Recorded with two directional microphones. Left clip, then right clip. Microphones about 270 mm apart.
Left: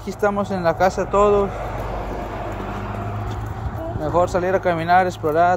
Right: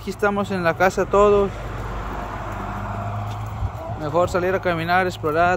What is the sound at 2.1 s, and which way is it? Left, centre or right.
Vehicle, centre.